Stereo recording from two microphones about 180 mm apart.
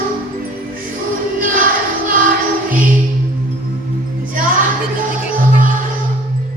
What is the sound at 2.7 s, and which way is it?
Music, 50° right (ahead or behind).